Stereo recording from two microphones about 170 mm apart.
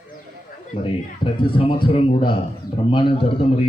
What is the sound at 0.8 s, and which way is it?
A man's voice, 30° left (ahead or behind).